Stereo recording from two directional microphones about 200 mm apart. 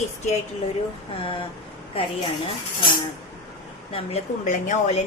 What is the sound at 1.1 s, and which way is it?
Speech, 25° left (ahead or behind).